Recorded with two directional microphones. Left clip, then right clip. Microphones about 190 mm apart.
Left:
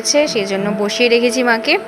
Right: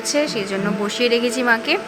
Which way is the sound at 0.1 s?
15° left (ahead or behind).